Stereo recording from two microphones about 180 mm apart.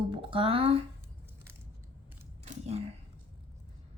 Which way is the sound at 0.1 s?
30° right (ahead or behind).